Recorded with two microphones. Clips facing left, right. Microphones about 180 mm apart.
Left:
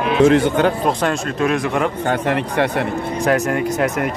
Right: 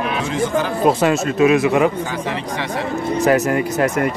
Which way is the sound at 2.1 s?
60° left (ahead or behind).